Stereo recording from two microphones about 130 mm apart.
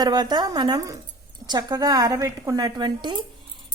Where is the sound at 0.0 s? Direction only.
30° right (ahead or behind).